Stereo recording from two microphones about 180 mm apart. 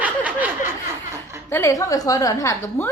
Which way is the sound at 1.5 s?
15° left (ahead or behind).